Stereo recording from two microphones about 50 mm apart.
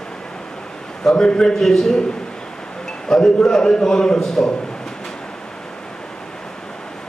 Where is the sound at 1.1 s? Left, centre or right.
Centre.